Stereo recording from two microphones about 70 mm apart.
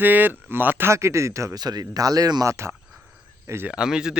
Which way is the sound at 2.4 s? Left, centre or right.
Right.